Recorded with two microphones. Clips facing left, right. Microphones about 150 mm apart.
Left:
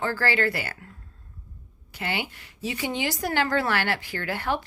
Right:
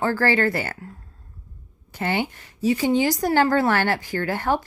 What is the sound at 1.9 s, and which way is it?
A woman's voice, 50° right (ahead or behind).